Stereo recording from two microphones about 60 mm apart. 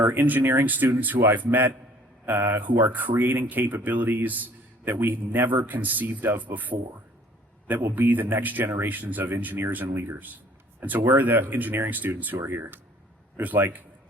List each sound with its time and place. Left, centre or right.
0.0 s a man's voice: right
10.8 s a man's voice: right
12.4 s speech: right
13.4 s a man's voice: right